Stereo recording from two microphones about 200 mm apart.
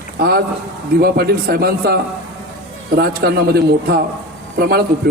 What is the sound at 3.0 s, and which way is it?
A man's voice, 50° right (ahead or behind).